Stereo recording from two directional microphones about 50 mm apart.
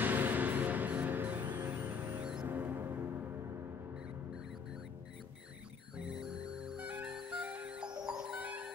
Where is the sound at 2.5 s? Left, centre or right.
Right.